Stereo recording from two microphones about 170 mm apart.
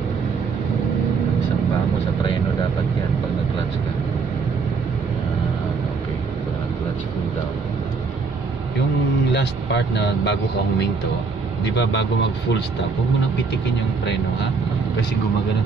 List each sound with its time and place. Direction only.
9.3 s speech: 90° left
11.7 s speech: 90° left